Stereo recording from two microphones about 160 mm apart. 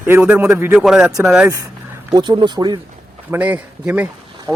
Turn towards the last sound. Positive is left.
turn(degrees=-10)  # may be behind; listen again after turning